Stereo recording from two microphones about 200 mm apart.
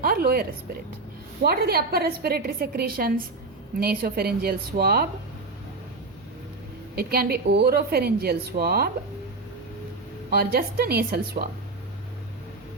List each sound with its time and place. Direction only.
0.0 s speech: 45° right (ahead or behind)
1.5 s a woman's voice: 50° right (ahead or behind)
6.9 s a woman's voice: 50° right (ahead or behind)
10.2 s a woman's voice: 50° right (ahead or behind)